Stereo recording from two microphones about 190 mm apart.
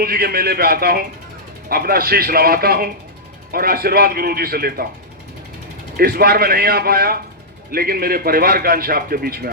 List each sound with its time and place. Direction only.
0.0 s a man's voice: 55° right (ahead or behind)
6.0 s a man's voice: 55° right (ahead or behind)